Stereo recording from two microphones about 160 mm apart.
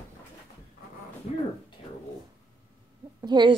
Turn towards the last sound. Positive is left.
turn(degrees=-25)  # may be behind; listen again after turning